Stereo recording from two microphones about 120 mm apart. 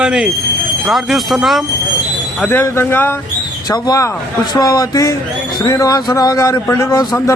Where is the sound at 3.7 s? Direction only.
30° left (ahead or behind).